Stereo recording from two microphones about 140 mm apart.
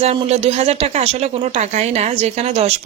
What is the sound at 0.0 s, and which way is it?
A woman's voice, 45° right (ahead or behind).